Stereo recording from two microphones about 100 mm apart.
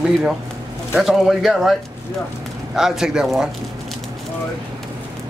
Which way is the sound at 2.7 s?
5° right (ahead or behind).